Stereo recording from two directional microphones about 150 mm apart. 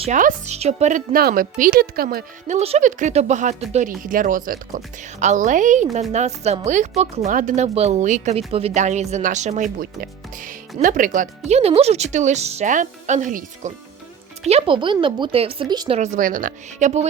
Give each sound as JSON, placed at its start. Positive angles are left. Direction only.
{"t": 0.1, "sound": "a woman's voice", "side_deg": -60}
{"t": 1.1, "sound": "speech", "side_deg": -75}
{"t": 2.5, "sound": "a woman's voice", "side_deg": -45}
{"t": 5.2, "sound": "a woman's voice", "side_deg": -55}
{"t": 14.4, "sound": "a woman's voice", "side_deg": -40}
{"t": 15.9, "sound": "speech", "side_deg": -50}